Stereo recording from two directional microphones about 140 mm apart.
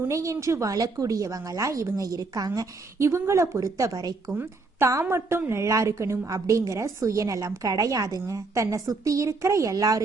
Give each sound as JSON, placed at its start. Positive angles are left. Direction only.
{"t": 0.0, "sound": "a woman's voice", "side_deg": -20}